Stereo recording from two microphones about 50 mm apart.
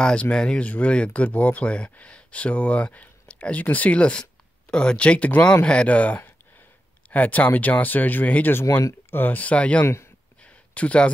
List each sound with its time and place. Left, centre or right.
0.0 s speech: centre; by 9.4 s left
9.4 s speech: left
10.4 s a sound: left